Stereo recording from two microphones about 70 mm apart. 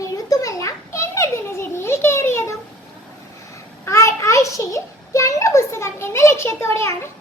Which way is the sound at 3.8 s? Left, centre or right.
Left.